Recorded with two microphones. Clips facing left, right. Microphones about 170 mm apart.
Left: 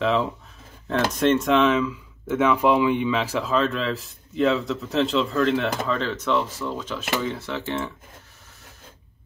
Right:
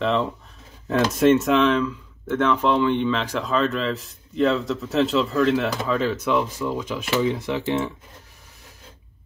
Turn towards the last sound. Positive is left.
turn(degrees=-15)  # may be behind; listen again after turning